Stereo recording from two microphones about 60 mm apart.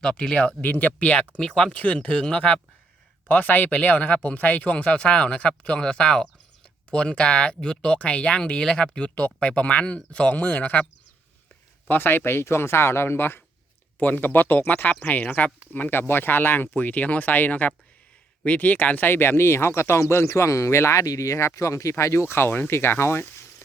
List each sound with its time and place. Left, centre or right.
0.0 s speech: centre
0.6 s speech: left
11.9 s speech: left
23.2 s a sound: left